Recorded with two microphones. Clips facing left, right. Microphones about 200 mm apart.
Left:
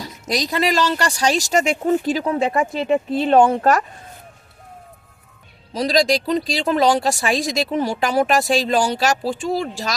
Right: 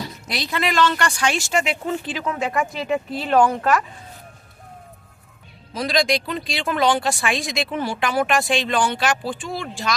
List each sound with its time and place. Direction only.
0.0 s speech: 40° left (ahead or behind)
5.7 s speech: 40° left (ahead or behind)